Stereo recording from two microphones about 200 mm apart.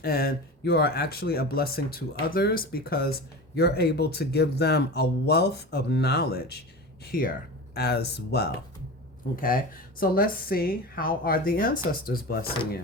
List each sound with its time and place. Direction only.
0.0 s speech: 50° left (ahead or behind)